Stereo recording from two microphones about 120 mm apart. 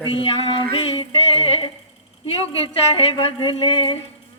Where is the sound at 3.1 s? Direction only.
50° left (ahead or behind).